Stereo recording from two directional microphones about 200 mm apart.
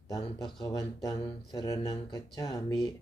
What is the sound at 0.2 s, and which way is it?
Speech, 20° left (ahead or behind).